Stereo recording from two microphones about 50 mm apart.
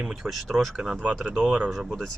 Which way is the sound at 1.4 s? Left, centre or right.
Right.